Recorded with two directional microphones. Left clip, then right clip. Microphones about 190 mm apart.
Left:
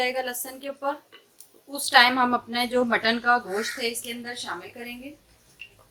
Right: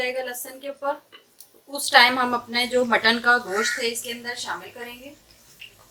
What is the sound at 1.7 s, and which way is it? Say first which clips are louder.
A woman's voice: right 2 dB; 15° left (ahead or behind).